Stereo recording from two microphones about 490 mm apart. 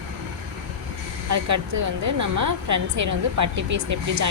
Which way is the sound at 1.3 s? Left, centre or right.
Right.